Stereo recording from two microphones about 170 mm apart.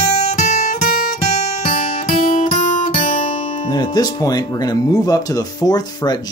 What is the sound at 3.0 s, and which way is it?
Speech, 35° left (ahead or behind).